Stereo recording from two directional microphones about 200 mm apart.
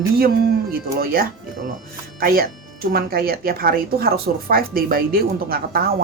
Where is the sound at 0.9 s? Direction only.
45° right (ahead or behind).